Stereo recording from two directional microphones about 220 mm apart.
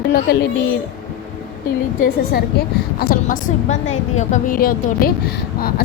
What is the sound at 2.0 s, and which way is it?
A woman's voice, 40° left (ahead or behind).